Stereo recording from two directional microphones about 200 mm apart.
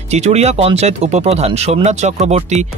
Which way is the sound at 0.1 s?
35° right (ahead or behind).